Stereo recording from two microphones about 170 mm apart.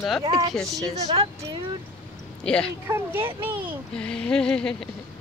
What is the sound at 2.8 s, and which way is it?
Speech, 15° right (ahead or behind).